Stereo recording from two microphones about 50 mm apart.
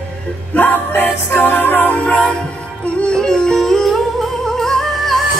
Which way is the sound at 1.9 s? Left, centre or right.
Left.